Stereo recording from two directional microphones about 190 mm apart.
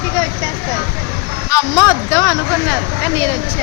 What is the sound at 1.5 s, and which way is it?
Speech, 15° left (ahead or behind).